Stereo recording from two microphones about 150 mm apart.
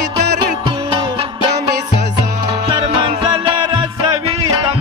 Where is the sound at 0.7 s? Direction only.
30° right (ahead or behind).